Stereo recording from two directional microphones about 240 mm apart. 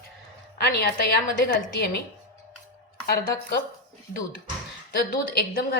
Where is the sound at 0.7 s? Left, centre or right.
Left.